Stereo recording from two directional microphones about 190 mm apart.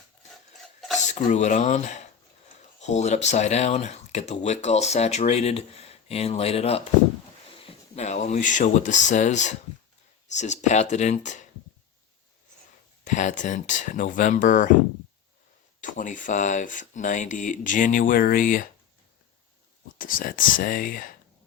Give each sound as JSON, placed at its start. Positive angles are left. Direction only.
{"t": 0.6, "sound": "a sound", "side_deg": 0}
{"t": 0.9, "sound": "speech", "side_deg": 40}
{"t": 13.1, "sound": "speech", "side_deg": 40}
{"t": 15.8, "sound": "speech", "side_deg": 45}
{"t": 20.0, "sound": "speech", "side_deg": 45}